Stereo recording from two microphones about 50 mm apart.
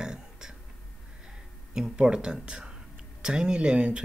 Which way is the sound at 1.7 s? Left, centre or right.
Centre.